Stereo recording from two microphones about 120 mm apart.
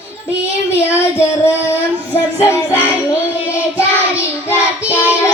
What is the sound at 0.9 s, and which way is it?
Child singing, 20° left (ahead or behind).